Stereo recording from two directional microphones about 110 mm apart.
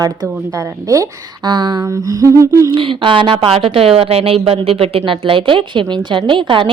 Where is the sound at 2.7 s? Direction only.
50° right (ahead or behind).